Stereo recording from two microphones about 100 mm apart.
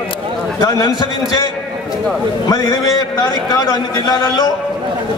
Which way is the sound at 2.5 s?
40° left (ahead or behind).